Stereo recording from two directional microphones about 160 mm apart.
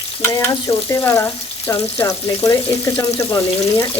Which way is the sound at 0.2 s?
15° left (ahead or behind).